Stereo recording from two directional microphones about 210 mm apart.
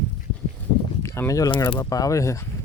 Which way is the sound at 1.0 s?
15° left (ahead or behind).